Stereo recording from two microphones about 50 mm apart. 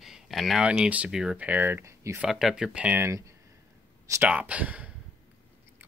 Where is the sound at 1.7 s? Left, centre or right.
Right.